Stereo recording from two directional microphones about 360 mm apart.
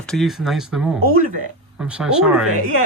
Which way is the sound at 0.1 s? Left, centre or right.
Centre.